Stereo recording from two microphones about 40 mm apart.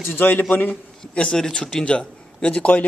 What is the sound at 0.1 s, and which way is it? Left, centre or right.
Speech, left.